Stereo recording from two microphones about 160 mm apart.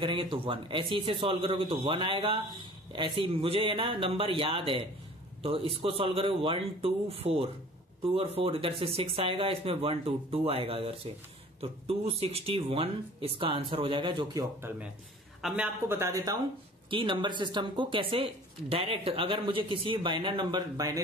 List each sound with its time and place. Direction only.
0.0 s a man's voice: 30° right (ahead or behind)
15.4 s speech: 5° right (ahead or behind)
16.9 s a man's voice: 30° right (ahead or behind)